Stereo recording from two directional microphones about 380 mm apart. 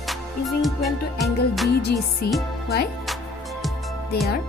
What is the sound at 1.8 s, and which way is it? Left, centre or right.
Music, left.